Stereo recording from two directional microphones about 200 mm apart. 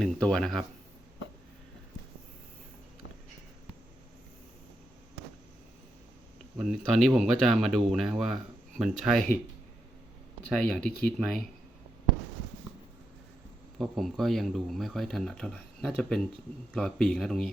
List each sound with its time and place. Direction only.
0.0 s speech: 5° left (ahead or behind)
6.6 s speech: centre (ahead or behind)
10.5 s speech: 5° left (ahead or behind)
13.7 s speech: centre (ahead or behind)